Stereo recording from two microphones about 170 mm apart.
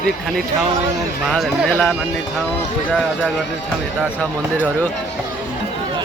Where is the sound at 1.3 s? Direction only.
5° left (ahead or behind).